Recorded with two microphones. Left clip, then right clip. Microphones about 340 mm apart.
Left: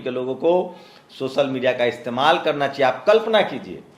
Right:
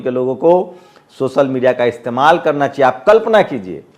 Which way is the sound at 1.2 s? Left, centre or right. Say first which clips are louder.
Right 7 dB; right.